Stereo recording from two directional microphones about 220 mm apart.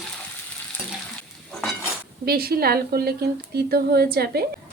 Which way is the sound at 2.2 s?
45° right (ahead or behind).